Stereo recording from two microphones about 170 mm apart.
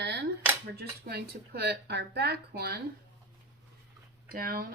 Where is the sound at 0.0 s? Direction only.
80° right.